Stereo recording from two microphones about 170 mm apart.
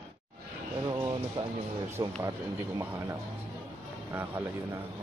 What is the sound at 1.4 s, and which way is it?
Speech, 25° right (ahead or behind).